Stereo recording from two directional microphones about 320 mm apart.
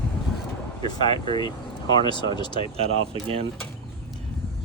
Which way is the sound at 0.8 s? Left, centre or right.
Centre.